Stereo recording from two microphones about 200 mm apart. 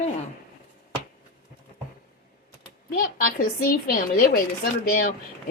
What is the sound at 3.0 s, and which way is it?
Speech, 45° left (ahead or behind).